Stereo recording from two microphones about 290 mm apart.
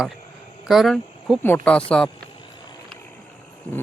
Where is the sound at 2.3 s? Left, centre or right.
Centre.